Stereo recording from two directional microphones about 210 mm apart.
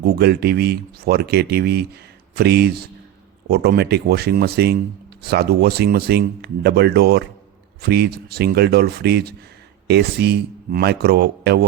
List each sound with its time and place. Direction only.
0.0 s speech: 50° right (ahead or behind)